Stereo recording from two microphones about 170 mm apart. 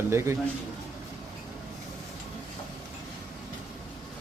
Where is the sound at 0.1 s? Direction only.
15° right (ahead or behind).